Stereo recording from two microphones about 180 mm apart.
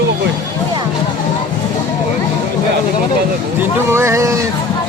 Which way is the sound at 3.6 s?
15° right (ahead or behind).